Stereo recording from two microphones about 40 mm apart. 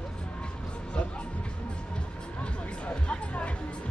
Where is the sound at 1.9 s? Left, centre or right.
Left.